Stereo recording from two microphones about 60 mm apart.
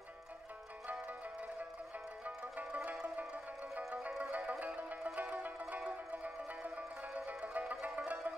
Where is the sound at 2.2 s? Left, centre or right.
Right.